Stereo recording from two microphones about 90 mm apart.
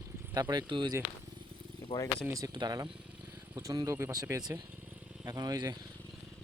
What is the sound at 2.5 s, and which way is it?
Speech, 45° right (ahead or behind).